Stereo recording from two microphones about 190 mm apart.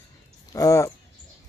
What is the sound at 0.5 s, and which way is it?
Speech, 15° left (ahead or behind).